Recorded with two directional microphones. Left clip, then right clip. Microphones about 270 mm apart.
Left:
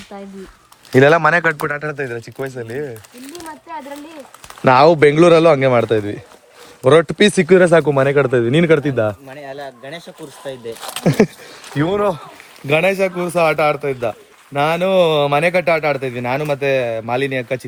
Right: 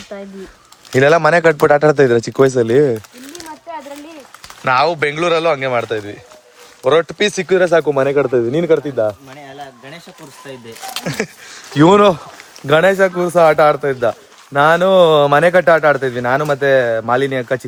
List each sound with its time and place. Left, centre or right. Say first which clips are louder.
0.1 s a man's voice: right 4 dB; centre
2.6 s speech: right 13 dB; right
4.6 s speech: left 4 dB; centre; by 9.1 s left
9.5 s speech: left 4 dB; centre
11.0 s speech: left 8 dB; left
12.6 s a man's voice: right 4 dB; centre